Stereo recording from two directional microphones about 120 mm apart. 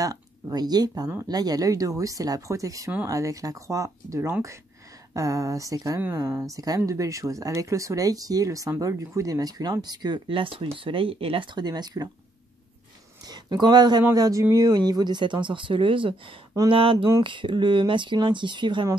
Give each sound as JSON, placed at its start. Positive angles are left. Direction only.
{"t": 0.0, "sound": "speech", "side_deg": -30}
{"t": 13.3, "sound": "speech", "side_deg": -35}